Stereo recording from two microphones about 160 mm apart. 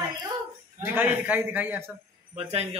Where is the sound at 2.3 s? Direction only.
40° right (ahead or behind).